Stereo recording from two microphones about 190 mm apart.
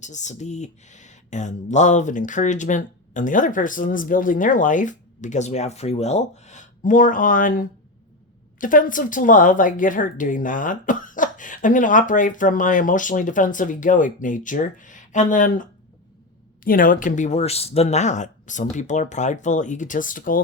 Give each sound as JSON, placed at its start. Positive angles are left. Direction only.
{"t": 0.0, "sound": "speech", "side_deg": 40}
{"t": 16.6, "sound": "speech", "side_deg": 45}